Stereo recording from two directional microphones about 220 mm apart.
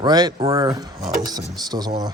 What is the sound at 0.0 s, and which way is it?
Speech, 20° right (ahead or behind).